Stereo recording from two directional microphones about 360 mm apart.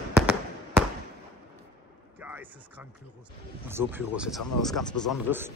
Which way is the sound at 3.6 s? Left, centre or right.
Centre.